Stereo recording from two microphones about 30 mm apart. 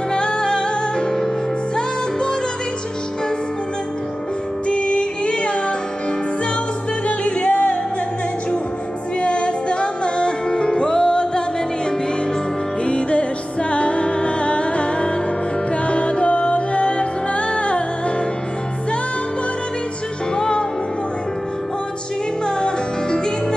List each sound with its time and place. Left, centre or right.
0.1 s music: left
4.6 s music: left
7.1 s music: left
9.2 s music: left
12.8 s music: left
20.3 s music: left
22.6 s music: left